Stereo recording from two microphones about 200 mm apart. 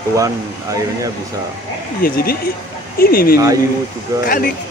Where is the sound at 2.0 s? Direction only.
45° left (ahead or behind).